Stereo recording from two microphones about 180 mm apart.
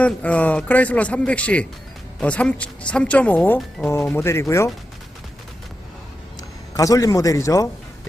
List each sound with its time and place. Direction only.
0.0 s a woman's voice: 10° left (ahead or behind)
6.7 s a man's voice: 20° left (ahead or behind)